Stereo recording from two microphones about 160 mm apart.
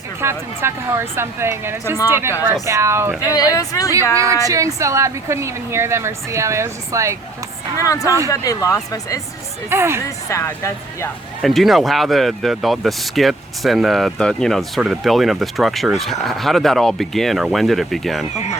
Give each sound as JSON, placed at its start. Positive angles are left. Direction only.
{"t": 0.2, "sound": "a woman's voice", "side_deg": -15}
{"t": 3.3, "sound": "speech", "side_deg": 20}
{"t": 4.1, "sound": "a woman's voice", "side_deg": -20}
{"t": 7.8, "sound": "speech", "side_deg": 20}
{"t": 9.6, "sound": "a woman's voice", "side_deg": -15}
{"t": 10.2, "sound": "speech", "side_deg": 20}
{"t": 11.4, "sound": "speech", "side_deg": 0}